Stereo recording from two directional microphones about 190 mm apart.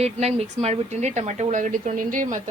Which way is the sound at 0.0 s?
35° right (ahead or behind).